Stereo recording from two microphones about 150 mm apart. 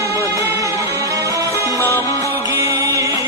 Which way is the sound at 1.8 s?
20° left (ahead or behind).